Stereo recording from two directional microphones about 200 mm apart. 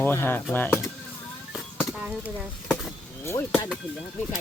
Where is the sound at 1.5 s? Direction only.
Centre (ahead or behind).